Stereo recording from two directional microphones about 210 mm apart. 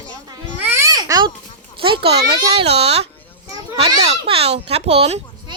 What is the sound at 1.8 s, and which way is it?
Speech, 25° right (ahead or behind).